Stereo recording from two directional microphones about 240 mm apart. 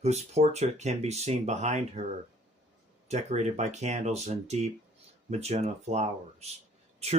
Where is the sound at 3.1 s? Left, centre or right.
Right.